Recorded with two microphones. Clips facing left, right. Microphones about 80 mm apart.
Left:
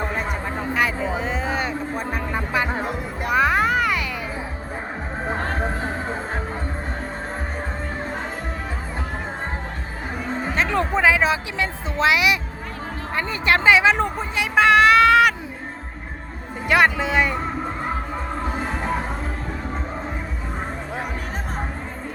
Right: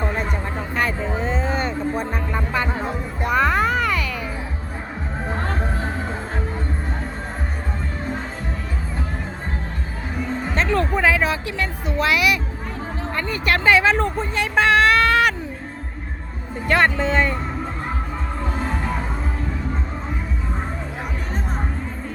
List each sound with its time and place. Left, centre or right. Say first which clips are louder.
0.2 s a sound: even; centre
10.5 s music: even; centre
13.1 s speech: left 2 dB; left; by 15.3 s centre
16.6 s speech: even; centre